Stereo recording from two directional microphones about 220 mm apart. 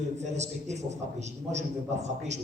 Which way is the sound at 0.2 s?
30° right (ahead or behind).